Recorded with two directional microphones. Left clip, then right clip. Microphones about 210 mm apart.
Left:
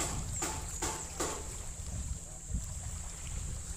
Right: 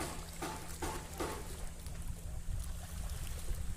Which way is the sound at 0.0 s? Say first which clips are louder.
Left 4 dB; 40° left (ahead or behind).